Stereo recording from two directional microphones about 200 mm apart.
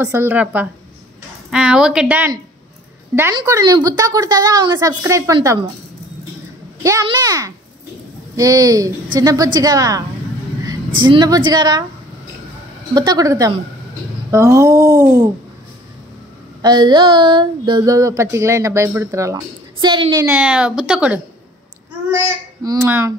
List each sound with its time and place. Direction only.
0.0 s a woman's voice: 10° right (ahead or behind)
6.8 s a woman's voice: 15° right (ahead or behind)
12.9 s a woman's voice: 20° right (ahead or behind)
16.6 s a woman's voice: 20° right (ahead or behind)
20.3 s a woman's voice: 5° right (ahead or behind)
22.6 s speech: 15° right (ahead or behind)